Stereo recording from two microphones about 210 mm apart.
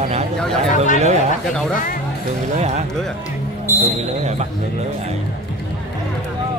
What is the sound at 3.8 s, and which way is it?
Speech, 30° right (ahead or behind).